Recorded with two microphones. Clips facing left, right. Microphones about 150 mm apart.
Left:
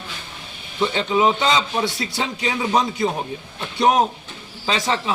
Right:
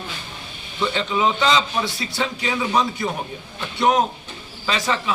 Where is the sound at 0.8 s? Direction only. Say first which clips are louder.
Left 3 dB; 25° left (ahead or behind).